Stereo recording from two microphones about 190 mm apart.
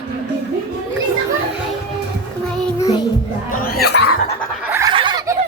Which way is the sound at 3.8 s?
60° left (ahead or behind).